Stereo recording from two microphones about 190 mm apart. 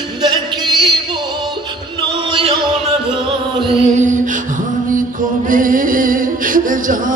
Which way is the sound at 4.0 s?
40° right (ahead or behind).